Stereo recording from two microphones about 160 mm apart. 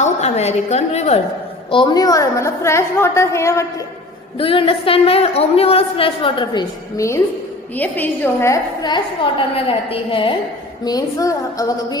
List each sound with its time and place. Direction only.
0.0 s a woman's voice: 45° left (ahead or behind)
1.7 s a woman's voice: 30° left (ahead or behind)
4.4 s a woman's voice: 35° left (ahead or behind)
7.7 s a woman's voice: 10° left (ahead or behind)
8.8 s a woman's voice: 30° left (ahead or behind)
10.8 s a woman's voice: 25° left (ahead or behind)